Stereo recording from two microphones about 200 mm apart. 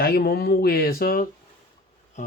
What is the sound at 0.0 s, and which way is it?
Speech, 50° left (ahead or behind).